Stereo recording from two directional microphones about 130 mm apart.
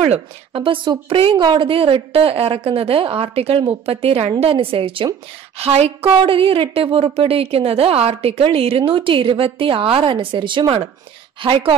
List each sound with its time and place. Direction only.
0.1 s a woman's voice: 45° right (ahead or behind)